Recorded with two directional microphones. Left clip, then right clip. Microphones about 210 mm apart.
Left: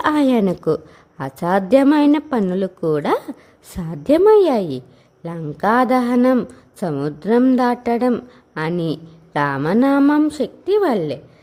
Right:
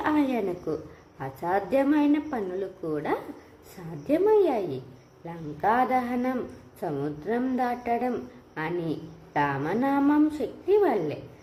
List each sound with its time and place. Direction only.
0.0 s a woman's voice: 50° left (ahead or behind)